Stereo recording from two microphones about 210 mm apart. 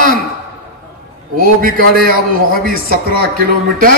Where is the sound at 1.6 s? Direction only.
45° right (ahead or behind).